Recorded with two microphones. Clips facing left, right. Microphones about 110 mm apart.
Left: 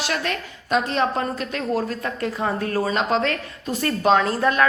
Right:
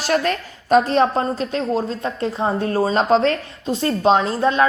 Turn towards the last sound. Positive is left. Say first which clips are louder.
# right 2 dB
turn(degrees=-25)  # may be behind; listen again after turning